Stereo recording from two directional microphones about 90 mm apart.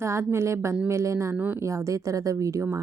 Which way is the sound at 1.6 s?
35° right (ahead or behind).